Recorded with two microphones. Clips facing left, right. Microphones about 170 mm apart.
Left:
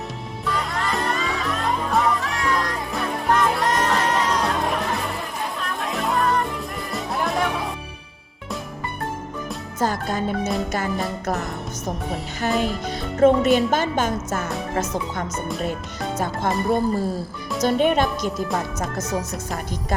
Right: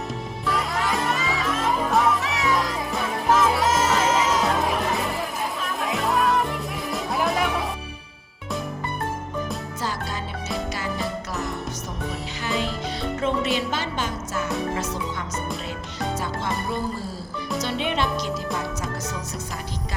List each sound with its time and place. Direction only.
0.4 s music: centre (ahead or behind)
9.8 s music: 50° left (ahead or behind)
10.7 s speech: 50° left (ahead or behind)